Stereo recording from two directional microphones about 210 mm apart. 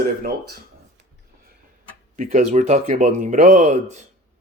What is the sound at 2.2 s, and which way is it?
Speech, 35° right (ahead or behind).